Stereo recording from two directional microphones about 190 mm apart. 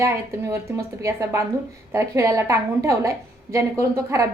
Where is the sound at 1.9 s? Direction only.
15° right (ahead or behind).